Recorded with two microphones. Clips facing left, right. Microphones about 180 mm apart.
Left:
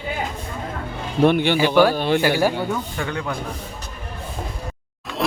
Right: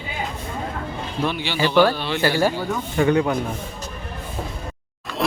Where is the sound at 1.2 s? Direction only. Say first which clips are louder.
Left 9 dB; 55° left (ahead or behind).